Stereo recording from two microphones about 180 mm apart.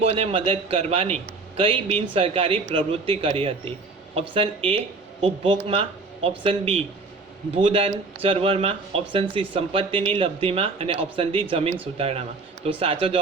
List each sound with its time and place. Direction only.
0.0 s a man's voice: 35° right (ahead or behind)